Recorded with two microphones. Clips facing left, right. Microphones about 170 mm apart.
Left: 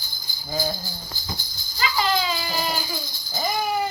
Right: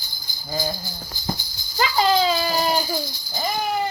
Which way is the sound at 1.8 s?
40° right (ahead or behind).